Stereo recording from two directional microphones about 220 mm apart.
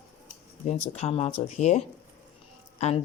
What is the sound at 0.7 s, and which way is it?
A woman's voice, 30° left (ahead or behind).